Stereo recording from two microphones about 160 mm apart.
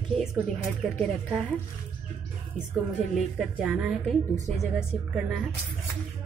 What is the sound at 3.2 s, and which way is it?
Speech, 5° right (ahead or behind).